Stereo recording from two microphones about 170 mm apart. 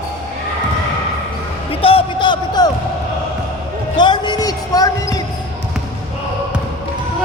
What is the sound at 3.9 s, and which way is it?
Basketball bounce, 25° left (ahead or behind).